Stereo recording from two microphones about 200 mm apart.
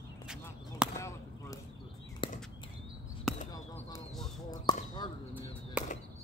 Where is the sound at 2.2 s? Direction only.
25° left (ahead or behind).